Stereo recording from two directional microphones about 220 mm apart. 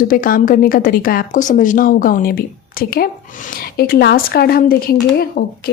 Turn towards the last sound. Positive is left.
turn(degrees=45)  # may be behind; listen again after turning